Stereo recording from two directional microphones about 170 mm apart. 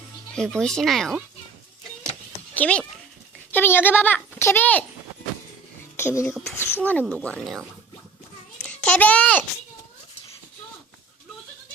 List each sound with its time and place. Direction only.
0.3 s speech: 5° left (ahead or behind)
2.6 s a child's voice: 5° left (ahead or behind)
6.0 s a child's voice: 15° left (ahead or behind)
6.3 s speech: centre (ahead or behind)
8.5 s a sound: 5° left (ahead or behind)